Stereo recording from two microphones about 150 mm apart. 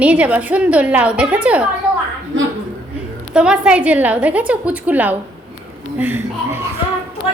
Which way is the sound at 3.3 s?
5° right (ahead or behind).